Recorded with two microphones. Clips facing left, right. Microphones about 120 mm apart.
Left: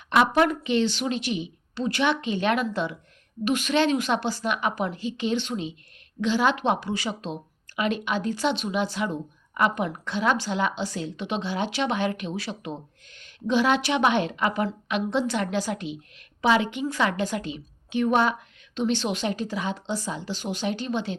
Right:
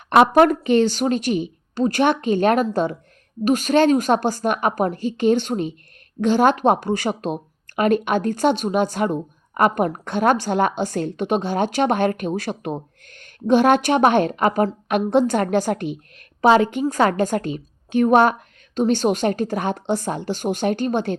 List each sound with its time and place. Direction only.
0.2 s a woman's voice: 50° right (ahead or behind)